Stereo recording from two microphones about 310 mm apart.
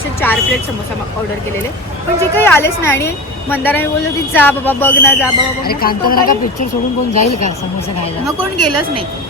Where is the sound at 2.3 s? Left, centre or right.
Centre.